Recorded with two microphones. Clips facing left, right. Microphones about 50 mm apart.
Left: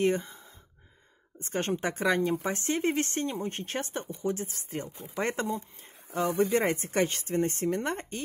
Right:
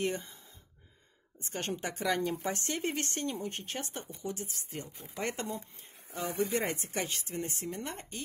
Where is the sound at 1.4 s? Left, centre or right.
Left.